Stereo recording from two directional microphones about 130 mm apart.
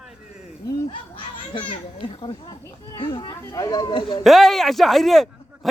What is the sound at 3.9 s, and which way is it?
Speech, 40° left (ahead or behind).